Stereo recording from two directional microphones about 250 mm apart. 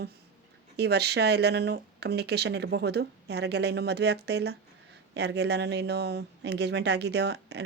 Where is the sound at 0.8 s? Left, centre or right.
Right.